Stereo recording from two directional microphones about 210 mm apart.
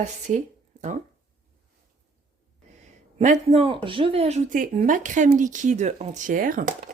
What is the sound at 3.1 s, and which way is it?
Speech, 30° right (ahead or behind).